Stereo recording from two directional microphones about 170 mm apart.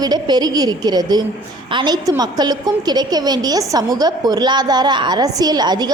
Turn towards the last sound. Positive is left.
turn(degrees=-25)  # may be behind; listen again after turning